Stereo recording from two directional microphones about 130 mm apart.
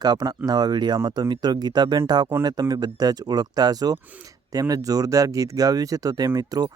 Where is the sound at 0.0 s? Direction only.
30° right (ahead or behind).